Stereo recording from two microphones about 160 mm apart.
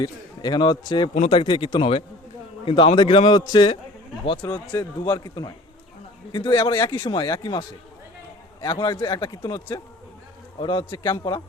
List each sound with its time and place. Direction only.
0.0 s a man's voice: 25° left (ahead or behind)
4.4 s a man's voice: 15° left (ahead or behind)
8.6 s a man's voice: 25° left (ahead or behind)